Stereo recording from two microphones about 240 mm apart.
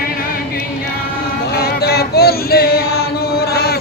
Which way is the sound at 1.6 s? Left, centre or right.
Left.